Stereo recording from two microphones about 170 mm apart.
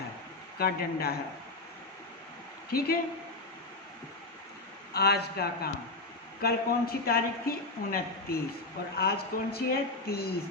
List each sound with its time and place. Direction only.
0.6 s a woman's voice: 65° left (ahead or behind)
2.6 s a woman's voice: 65° left (ahead or behind)
4.9 s a man's voice: 70° left (ahead or behind)